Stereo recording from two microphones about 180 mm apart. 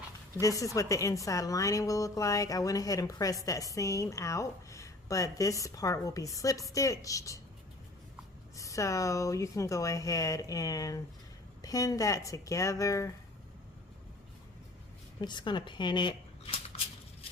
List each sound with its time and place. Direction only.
0.3 s a woman's voice: 20° left (ahead or behind)
8.5 s speech: 15° left (ahead or behind)
15.2 s speech: 25° left (ahead or behind)